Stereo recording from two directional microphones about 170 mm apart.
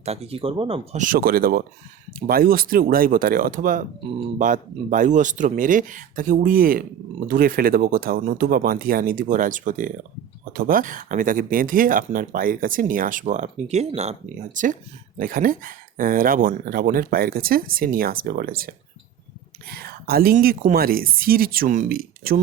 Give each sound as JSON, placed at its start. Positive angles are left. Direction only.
{"t": 0.0, "sound": "speech", "side_deg": -35}
{"t": 0.9, "sound": "speech", "side_deg": -55}
{"t": 19.7, "sound": "speech", "side_deg": -65}